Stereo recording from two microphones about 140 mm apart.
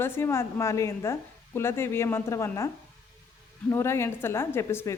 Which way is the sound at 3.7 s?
20° left (ahead or behind).